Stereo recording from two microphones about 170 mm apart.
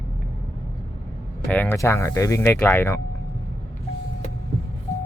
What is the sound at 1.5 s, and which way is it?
Speech, 10° left (ahead or behind).